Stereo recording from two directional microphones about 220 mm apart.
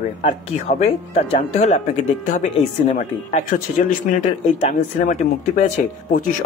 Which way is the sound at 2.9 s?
35° left (ahead or behind).